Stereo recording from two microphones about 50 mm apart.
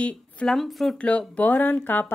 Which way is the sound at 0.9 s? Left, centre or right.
Left.